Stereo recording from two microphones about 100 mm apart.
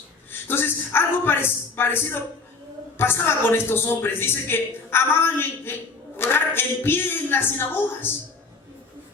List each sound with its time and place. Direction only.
0.3 s a woman's voice: 20° left (ahead or behind)